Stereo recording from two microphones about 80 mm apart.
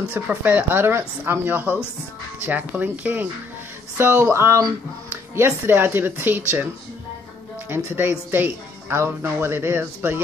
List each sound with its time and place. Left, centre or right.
0.1 s speech: right
4.0 s a sound: right
5.1 s speech: right
7.7 s speech: right